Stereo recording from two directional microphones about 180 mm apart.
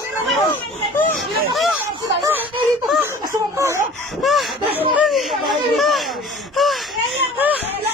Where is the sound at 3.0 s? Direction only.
15° right (ahead or behind).